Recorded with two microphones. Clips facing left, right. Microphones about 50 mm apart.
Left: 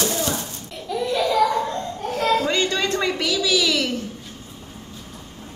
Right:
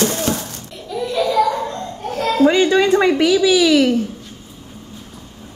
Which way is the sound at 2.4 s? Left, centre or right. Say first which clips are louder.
Right 9 dB; centre.